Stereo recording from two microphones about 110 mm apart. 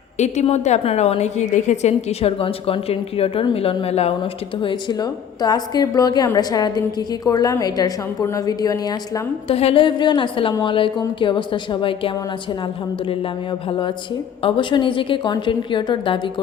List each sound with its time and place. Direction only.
0.2 s a woman's voice: 90° left; by 4.1 s 70° left (ahead or behind)
4.2 s a woman's voice: 45° left (ahead or behind)
9.5 s a woman's voice: 60° left (ahead or behind)